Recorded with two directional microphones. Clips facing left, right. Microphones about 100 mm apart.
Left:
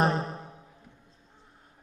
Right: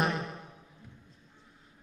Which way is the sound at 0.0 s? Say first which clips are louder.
Left 5 dB; 35° left (ahead or behind).